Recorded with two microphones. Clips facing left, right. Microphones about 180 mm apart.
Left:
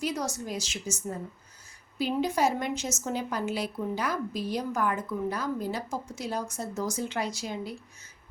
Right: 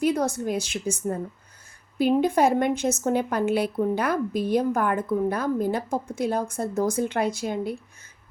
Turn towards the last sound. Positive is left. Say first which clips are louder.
# right 7 dB
turn(degrees=-55)  # may be behind; listen again after turning